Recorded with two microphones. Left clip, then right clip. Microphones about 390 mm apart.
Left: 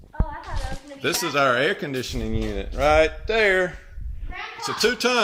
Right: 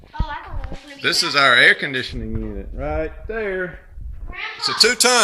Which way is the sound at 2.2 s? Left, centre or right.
Left.